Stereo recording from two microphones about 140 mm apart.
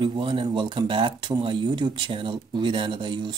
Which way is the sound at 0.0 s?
35° right (ahead or behind).